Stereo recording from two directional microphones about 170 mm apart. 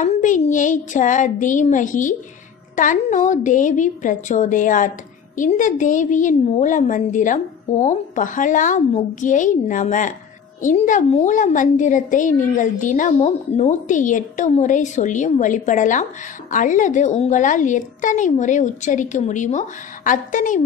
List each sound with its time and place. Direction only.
0.0 s a woman's voice: 45° left (ahead or behind)